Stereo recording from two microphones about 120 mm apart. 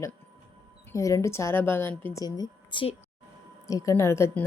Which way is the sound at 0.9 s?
25° left (ahead or behind).